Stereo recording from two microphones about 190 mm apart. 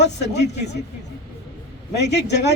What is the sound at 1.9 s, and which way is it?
Speech, 65° left (ahead or behind).